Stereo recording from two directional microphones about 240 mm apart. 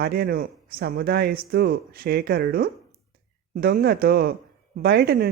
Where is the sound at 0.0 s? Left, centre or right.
Right.